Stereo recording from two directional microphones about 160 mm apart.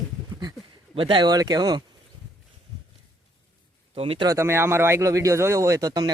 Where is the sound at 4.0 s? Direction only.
40° right (ahead or behind).